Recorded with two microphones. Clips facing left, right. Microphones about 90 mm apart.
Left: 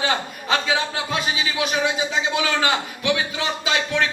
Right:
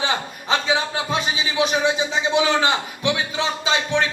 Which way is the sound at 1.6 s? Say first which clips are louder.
Right 4 dB; 25° right (ahead or behind).